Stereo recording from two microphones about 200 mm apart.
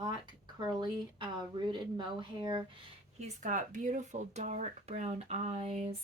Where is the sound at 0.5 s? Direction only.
20° right (ahead or behind).